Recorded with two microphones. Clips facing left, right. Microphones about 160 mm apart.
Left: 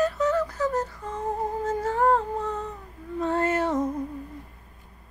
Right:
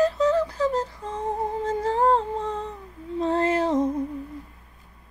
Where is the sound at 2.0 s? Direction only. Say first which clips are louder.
Left 1 dB; 25° right (ahead or behind).